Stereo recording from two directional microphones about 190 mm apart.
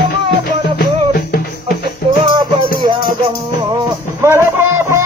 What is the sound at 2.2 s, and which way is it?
Music, 20° right (ahead or behind).